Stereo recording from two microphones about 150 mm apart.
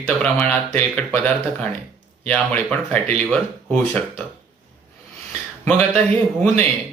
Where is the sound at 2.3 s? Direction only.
10° left (ahead or behind).